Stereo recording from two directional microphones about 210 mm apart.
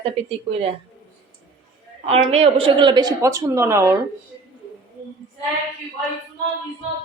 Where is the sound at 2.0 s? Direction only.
30° right (ahead or behind); by 3.9 s 15° right (ahead or behind).